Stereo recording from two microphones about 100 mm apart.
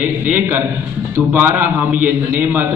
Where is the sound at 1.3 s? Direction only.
20° right (ahead or behind).